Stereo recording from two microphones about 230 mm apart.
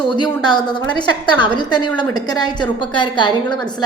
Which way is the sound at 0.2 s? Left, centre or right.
Centre.